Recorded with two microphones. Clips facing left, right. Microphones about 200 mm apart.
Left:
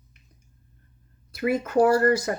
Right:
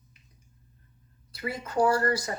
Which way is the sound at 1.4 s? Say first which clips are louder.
Left 6 dB; 55° left (ahead or behind).